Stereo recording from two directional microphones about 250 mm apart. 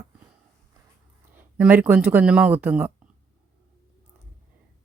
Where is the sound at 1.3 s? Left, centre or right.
Centre.